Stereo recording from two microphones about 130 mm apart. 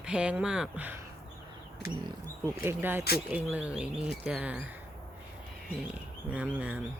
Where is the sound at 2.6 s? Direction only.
15° right (ahead or behind).